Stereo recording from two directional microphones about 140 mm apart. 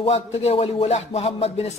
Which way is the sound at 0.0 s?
50° left (ahead or behind).